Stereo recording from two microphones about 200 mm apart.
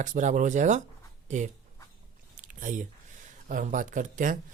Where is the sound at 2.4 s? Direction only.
40° right (ahead or behind).